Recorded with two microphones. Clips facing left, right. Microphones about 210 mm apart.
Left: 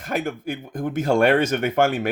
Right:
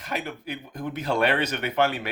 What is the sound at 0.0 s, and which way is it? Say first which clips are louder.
A woman's voice: left 6 dB; 50° left (ahead or behind).